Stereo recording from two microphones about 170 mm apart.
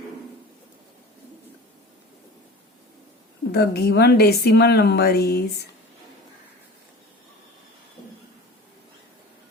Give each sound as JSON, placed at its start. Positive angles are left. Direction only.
{"t": 3.5, "sound": "a woman's voice", "side_deg": 70}